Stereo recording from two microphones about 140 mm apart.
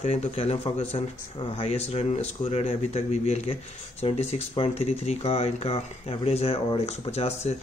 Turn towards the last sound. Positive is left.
turn(degrees=50)  # may be behind; listen again after turning